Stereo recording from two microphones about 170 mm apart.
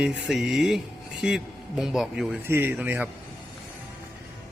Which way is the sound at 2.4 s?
15° right (ahead or behind).